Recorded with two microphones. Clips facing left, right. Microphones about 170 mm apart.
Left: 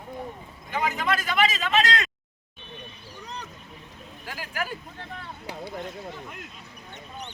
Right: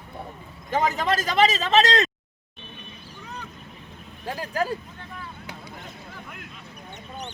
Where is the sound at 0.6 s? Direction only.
40° right (ahead or behind).